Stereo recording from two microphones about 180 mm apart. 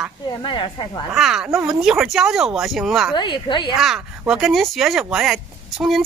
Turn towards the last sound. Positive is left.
turn(degrees=0)  # may be behind; listen again after turning